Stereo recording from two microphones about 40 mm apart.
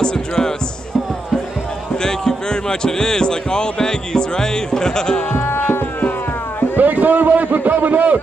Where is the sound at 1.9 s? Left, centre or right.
Centre.